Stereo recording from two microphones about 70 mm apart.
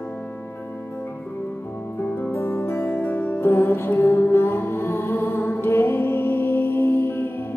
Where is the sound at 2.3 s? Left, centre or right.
Left.